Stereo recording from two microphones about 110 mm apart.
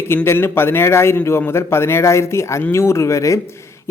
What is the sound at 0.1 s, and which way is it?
Speech, 20° left (ahead or behind).